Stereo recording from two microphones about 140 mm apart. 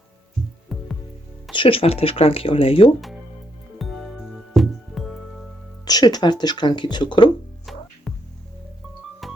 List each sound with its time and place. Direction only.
0.7 s music: centre (ahead or behind)
1.5 s speech: 40° left (ahead or behind)
3.8 s music: centre (ahead or behind)
5.8 s speech: 30° left (ahead or behind)
8.1 s music: centre (ahead or behind)
9.2 s music: centre (ahead or behind)